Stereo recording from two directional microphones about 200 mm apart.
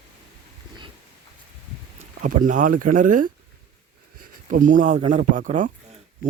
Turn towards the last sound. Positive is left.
turn(degrees=-40)  # may be behind; listen again after turning